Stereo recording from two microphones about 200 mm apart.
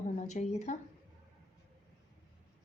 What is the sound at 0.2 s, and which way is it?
Speech, 35° left (ahead or behind).